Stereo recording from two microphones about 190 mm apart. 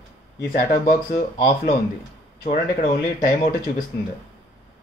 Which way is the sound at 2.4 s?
50° left (ahead or behind).